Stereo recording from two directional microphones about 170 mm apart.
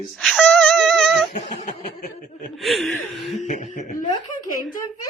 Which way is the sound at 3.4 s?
50° left (ahead or behind).